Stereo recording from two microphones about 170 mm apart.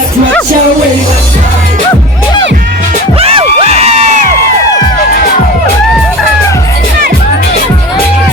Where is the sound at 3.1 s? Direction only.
35° right (ahead or behind).